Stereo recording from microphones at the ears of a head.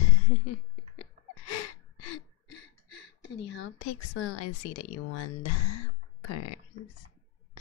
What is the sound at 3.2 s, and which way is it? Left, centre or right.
Speech, left.